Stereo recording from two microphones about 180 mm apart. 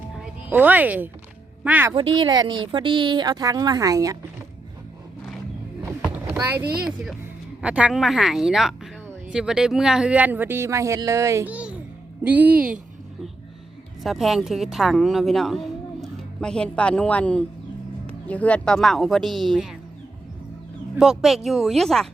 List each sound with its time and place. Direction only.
0.5 s speech: 10° right (ahead or behind)
2.1 s a woman's voice: 25° right (ahead or behind)
6.7 s speech: 5° right (ahead or behind)
14.0 s a woman's voice: centre (ahead or behind)
20.9 s speech: centre (ahead or behind)